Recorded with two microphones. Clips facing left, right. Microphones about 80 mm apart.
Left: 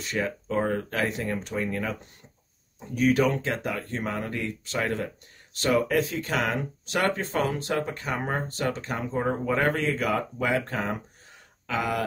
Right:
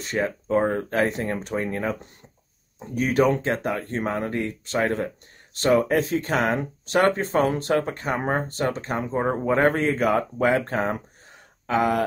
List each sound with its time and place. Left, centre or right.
0.0 s speech: right